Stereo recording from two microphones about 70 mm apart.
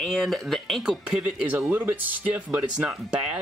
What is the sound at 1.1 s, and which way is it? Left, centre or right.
Speech, centre.